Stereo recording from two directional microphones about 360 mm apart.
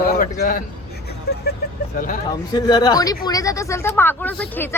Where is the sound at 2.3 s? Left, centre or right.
Centre.